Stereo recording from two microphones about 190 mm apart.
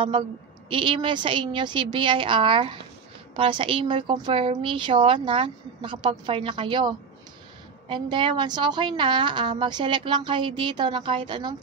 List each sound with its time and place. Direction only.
0.7 s a woman's voice: 25° right (ahead or behind)